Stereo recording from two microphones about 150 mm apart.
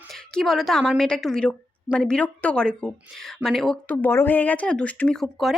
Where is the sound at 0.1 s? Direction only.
Centre (ahead or behind).